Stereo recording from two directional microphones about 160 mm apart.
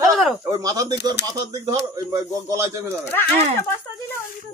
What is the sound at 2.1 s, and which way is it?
Speech, 20° right (ahead or behind).